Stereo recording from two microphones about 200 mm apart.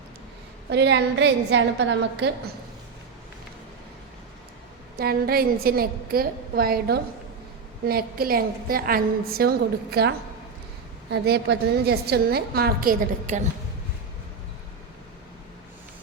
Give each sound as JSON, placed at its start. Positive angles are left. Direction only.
{"t": 0.7, "sound": "a woman's voice", "side_deg": -60}
{"t": 4.9, "sound": "a woman's voice", "side_deg": -50}